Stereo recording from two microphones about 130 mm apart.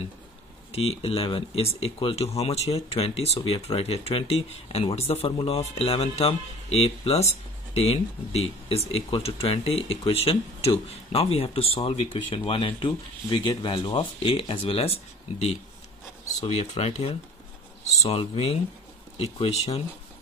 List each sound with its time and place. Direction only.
0.7 s speech: 50° left (ahead or behind)
16.4 s speech: 55° left (ahead or behind)